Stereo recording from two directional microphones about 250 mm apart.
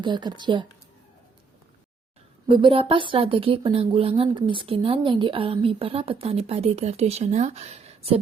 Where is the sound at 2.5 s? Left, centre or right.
Centre.